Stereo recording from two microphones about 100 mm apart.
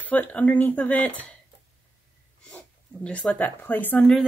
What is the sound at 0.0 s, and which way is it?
Speech, 15° left (ahead or behind).